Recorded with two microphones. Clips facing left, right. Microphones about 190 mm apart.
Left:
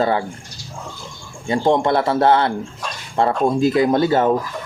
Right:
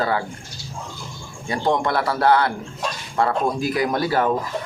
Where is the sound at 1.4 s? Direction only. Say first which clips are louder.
Left 5 dB; 25° left (ahead or behind).